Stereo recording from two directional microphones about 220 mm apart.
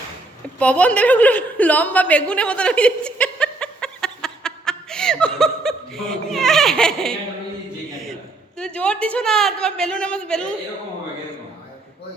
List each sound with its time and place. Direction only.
0.6 s a woman's voice: 5° left (ahead or behind)
8.5 s a woman's voice: 5° left (ahead or behind)